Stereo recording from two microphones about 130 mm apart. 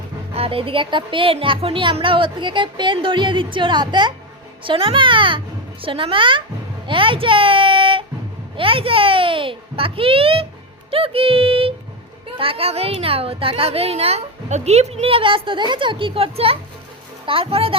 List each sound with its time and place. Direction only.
0.3 s a woman's voice: 45° right (ahead or behind)